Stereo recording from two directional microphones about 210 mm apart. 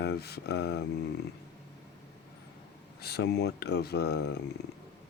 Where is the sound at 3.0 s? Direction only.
50° left (ahead or behind).